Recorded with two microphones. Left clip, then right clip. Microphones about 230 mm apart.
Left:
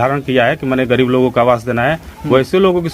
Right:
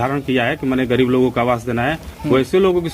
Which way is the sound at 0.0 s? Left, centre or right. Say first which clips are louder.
Left 5 dB; left.